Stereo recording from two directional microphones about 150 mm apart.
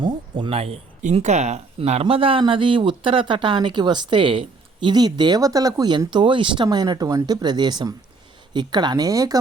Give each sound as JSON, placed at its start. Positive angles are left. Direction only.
{"t": 0.0, "sound": "speech", "side_deg": -35}